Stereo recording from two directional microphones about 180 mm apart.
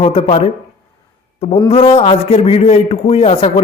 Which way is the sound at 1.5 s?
35° left (ahead or behind).